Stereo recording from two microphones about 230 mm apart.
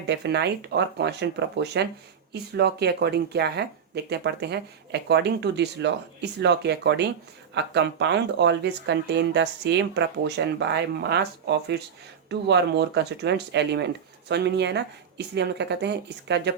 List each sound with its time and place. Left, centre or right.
0.1 s speech: right